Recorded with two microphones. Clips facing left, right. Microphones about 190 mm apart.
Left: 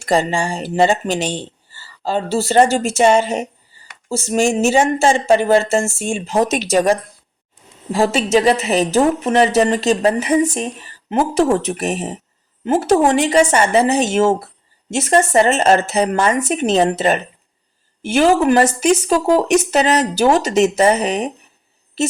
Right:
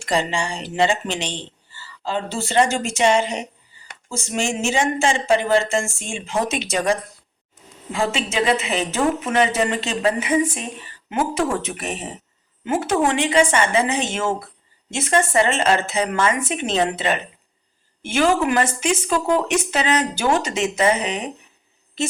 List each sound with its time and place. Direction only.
0.0 s a woman's voice: 40° left (ahead or behind)